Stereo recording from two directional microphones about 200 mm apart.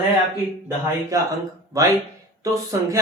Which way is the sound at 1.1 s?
15° right (ahead or behind).